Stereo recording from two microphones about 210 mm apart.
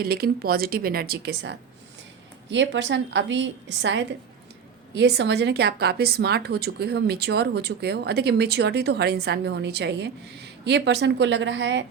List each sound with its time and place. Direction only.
0.0 s a woman's voice: 45° right (ahead or behind)